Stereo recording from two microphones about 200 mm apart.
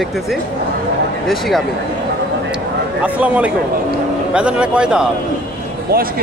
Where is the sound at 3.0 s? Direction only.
5° right (ahead or behind).